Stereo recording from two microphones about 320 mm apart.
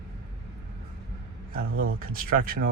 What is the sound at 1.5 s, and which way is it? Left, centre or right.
Speech, right.